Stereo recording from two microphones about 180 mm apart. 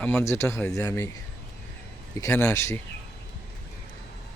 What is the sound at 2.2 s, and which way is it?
Speech, 15° left (ahead or behind).